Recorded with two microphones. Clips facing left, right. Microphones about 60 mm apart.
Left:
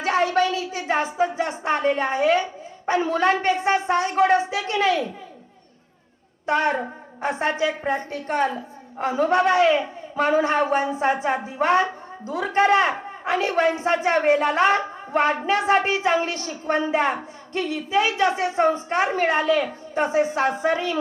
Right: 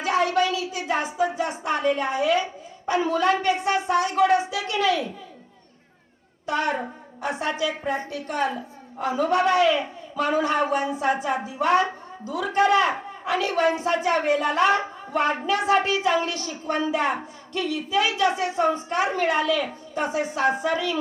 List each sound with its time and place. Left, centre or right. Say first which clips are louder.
0.0 s a woman's voice: left 1 dB; left
6.4 s a woman's voice: left 3 dB; left